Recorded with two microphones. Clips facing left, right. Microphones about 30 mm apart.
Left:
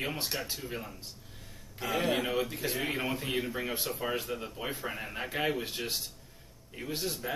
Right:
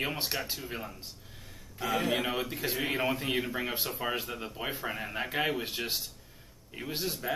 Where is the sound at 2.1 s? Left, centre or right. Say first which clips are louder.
Left 1 dB; centre.